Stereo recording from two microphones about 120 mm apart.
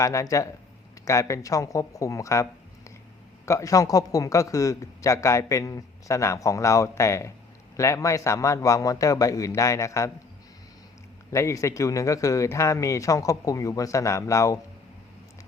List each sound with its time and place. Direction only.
0.0 s a man's voice: 25° left (ahead or behind)
11.3 s a man's voice: 25° left (ahead or behind)